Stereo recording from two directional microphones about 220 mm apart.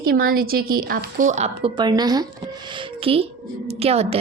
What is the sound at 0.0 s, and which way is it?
A woman's voice, 40° right (ahead or behind).